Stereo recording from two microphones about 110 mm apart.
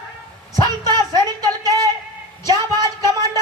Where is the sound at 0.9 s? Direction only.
35° right (ahead or behind).